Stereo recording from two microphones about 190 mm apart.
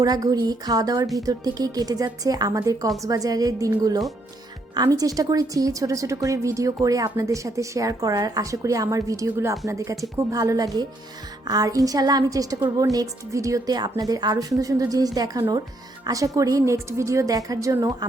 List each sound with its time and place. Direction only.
0.0 s a woman's voice: 20° right (ahead or behind)